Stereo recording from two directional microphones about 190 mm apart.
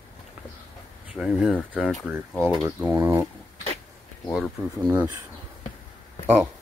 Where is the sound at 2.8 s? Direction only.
10° right (ahead or behind).